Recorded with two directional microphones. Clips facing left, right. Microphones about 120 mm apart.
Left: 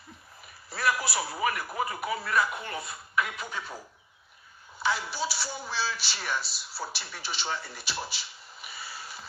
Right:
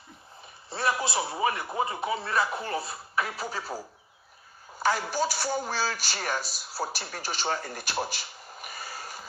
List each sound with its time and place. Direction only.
0.7 s a man's voice: 25° right (ahead or behind); by 9.2 s 45° right (ahead or behind)